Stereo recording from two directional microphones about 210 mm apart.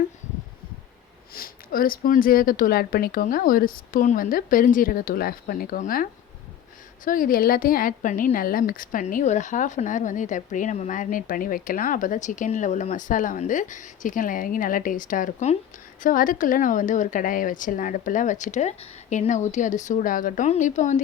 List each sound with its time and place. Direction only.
1.3 s speech: 45° left (ahead or behind)